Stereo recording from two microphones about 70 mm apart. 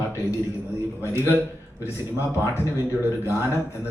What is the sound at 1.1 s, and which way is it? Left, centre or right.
Speech, right.